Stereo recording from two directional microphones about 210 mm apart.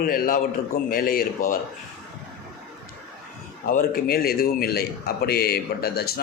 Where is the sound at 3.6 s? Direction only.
45° left (ahead or behind).